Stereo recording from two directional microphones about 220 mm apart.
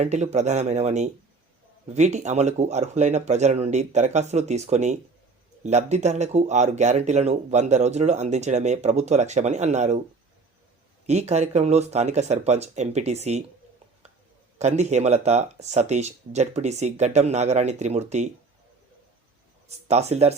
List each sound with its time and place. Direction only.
0.0 s speech: 30° right (ahead or behind)
11.0 s speech: 30° right (ahead or behind)
14.6 s speech: 30° right (ahead or behind)
19.6 s speech: 30° right (ahead or behind)